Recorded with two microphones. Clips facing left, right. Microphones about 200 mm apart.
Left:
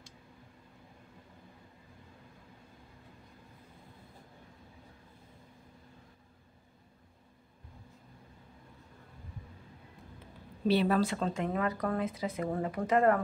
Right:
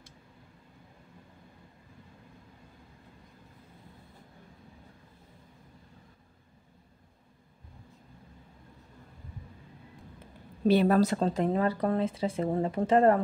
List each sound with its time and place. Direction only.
10.7 s speech: 45° right (ahead or behind); by 13.2 s 30° right (ahead or behind)